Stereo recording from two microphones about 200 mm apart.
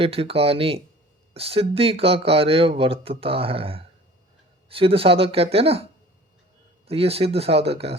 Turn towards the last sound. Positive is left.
turn(degrees=-30)  # may be behind; listen again after turning